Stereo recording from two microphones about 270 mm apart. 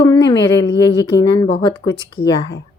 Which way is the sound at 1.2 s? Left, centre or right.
Centre.